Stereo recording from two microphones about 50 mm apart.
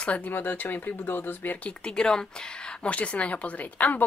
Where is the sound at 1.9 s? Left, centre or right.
Centre.